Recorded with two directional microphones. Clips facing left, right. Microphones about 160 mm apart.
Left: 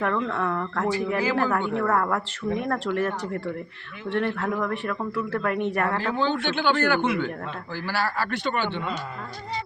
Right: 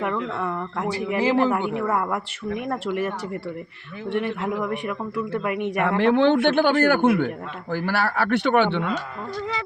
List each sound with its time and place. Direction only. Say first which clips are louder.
0.3 s a man's voice: left 1 dB; 10° right (ahead or behind)
1.2 s a man's voice: right 8 dB; 25° right (ahead or behind)
6.0 s a man's voice: right 8 dB; 70° right (ahead or behind)